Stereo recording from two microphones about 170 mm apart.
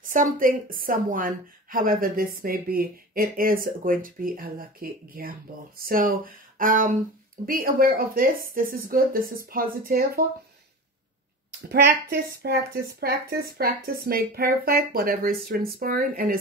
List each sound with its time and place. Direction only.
0.0 s a woman's voice: 50° right (ahead or behind)
11.7 s a woman's voice: 70° right (ahead or behind)